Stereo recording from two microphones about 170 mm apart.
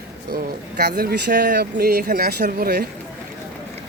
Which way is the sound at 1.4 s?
65° right (ahead or behind).